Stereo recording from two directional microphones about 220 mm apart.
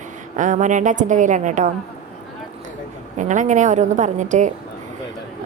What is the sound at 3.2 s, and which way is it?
A woman's voice, 35° right (ahead or behind).